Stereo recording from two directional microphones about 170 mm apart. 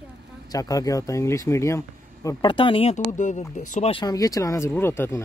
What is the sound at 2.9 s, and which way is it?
Speech, 45° left (ahead or behind).